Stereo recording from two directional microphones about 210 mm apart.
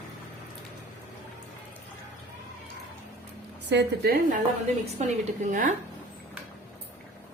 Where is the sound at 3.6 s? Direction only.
50° right (ahead or behind).